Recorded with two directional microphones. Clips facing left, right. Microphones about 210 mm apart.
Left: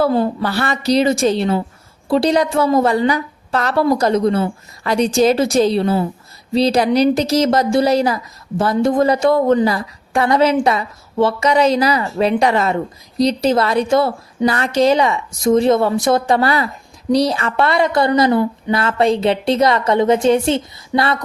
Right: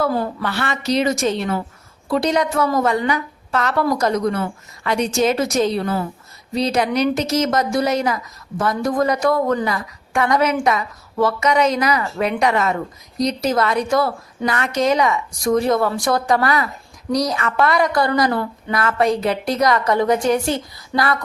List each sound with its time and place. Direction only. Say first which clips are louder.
0.0 s a woman's voice: left 5 dB; 25° left (ahead or behind)
0.4 s a woman's voice: left 4 dB; 35° left (ahead or behind)